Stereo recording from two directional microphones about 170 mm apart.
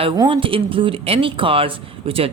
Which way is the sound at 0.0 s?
30° right (ahead or behind).